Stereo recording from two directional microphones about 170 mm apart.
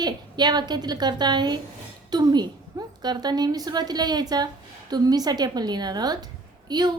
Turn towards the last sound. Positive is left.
turn(degrees=-25)  # may be behind; listen again after turning